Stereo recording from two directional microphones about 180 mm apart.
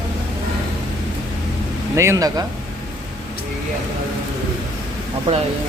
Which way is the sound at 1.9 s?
15° right (ahead or behind).